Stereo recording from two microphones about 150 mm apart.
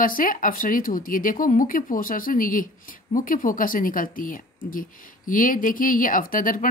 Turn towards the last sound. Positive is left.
turn(degrees=65)  # may be behind; listen again after turning